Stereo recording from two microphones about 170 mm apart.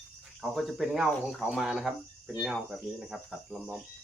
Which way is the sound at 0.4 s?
Centre (ahead or behind).